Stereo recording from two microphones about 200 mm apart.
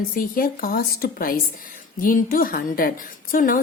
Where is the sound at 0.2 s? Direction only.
45° left (ahead or behind).